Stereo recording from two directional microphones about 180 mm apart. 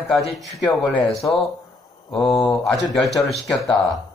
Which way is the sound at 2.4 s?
Centre (ahead or behind).